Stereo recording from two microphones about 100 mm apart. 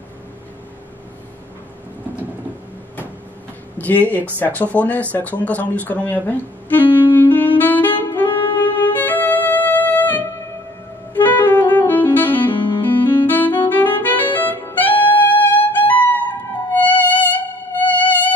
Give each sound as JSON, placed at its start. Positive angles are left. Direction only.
{"t": 3.7, "sound": "speech", "side_deg": 15}
{"t": 5.4, "sound": "music", "side_deg": 15}
{"t": 11.1, "sound": "saxophone", "side_deg": 20}
{"t": 16.7, "sound": "music", "side_deg": 15}